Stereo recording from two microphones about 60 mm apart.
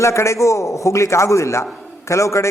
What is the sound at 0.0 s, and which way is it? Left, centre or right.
A man's voice, left.